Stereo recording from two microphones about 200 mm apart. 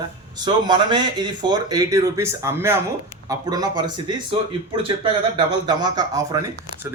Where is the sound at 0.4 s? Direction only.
20° right (ahead or behind).